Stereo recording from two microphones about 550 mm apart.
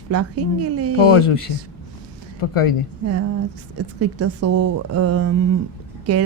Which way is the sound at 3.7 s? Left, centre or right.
Right.